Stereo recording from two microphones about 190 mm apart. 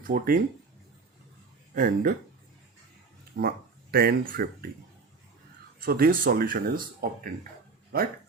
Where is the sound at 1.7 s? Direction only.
45° right (ahead or behind).